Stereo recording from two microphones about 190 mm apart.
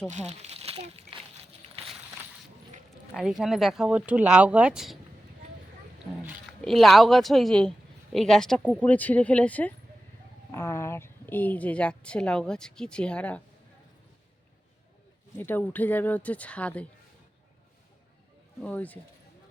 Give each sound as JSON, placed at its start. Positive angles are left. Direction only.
{"t": 0.1, "sound": "a sound", "side_deg": -35}
{"t": 3.2, "sound": "speech", "side_deg": 0}
{"t": 6.2, "sound": "a woman's voice", "side_deg": 0}
{"t": 15.4, "sound": "a woman's voice", "side_deg": 10}
{"t": 18.6, "sound": "a woman's voice", "side_deg": 10}